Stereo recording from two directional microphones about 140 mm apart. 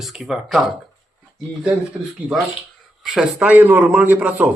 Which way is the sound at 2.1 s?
5° right (ahead or behind).